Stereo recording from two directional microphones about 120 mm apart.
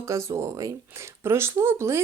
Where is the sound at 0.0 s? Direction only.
25° right (ahead or behind).